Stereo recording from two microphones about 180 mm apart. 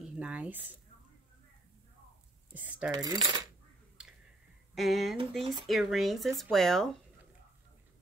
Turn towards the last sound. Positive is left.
turn(degrees=0)  # may be behind; listen again after turning